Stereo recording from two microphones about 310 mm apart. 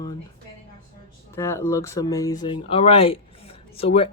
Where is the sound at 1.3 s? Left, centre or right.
Centre.